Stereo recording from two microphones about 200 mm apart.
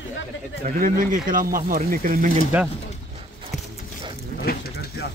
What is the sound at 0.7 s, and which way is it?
Speech, 45° right (ahead or behind).